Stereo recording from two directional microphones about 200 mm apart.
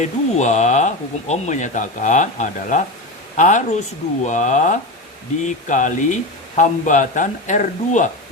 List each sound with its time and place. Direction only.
0.0 s speech: 35° left (ahead or behind)